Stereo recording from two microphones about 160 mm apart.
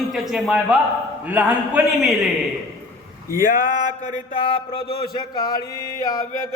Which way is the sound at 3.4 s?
60° left (ahead or behind).